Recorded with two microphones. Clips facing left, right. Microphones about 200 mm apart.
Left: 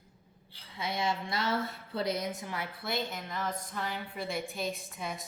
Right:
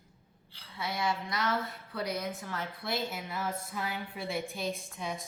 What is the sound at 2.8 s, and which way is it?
A woman's voice, 5° right (ahead or behind).